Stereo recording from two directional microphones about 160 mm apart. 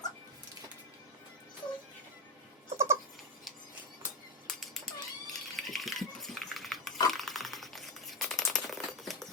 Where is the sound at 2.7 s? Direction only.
15° right (ahead or behind).